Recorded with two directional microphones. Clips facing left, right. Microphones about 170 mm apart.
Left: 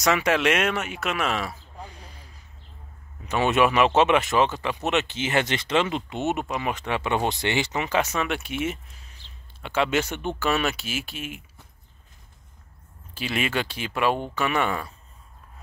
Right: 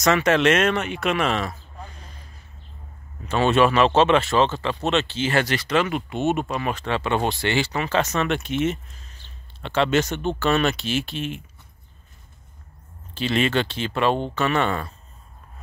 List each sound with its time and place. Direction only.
0.0 s speech: 10° left (ahead or behind)
3.3 s speech: 15° left (ahead or behind)
13.1 s speech: 10° left (ahead or behind)